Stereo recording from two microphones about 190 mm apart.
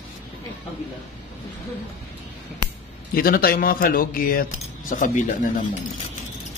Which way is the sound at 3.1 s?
50° left (ahead or behind).